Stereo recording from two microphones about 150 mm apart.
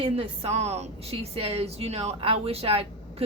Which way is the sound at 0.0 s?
40° right (ahead or behind).